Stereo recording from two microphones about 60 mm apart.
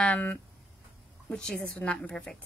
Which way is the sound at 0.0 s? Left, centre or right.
Left.